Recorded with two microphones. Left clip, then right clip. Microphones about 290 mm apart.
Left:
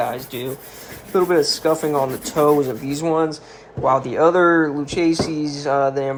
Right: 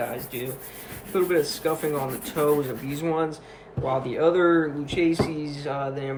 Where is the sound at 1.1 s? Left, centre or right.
Centre.